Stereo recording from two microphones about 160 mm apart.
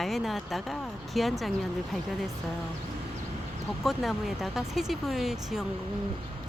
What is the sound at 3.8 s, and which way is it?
Speech, centre (ahead or behind).